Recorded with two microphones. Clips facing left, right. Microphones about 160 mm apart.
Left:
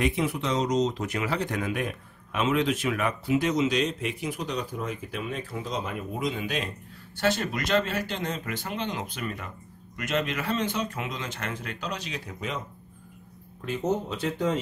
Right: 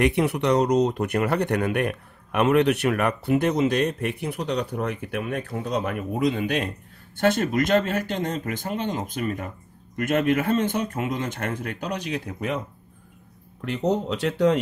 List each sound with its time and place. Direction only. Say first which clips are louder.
0.0 s a man's voice: right 5 dB; 70° right (ahead or behind)
13.7 s speech: right 4 dB; 70° right (ahead or behind)